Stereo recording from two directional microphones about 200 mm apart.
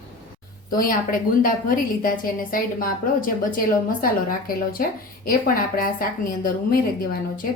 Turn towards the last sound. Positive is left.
turn(degrees=45)  # may be behind; listen again after turning